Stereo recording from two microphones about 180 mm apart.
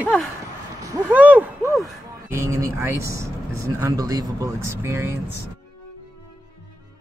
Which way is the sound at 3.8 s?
20° right (ahead or behind).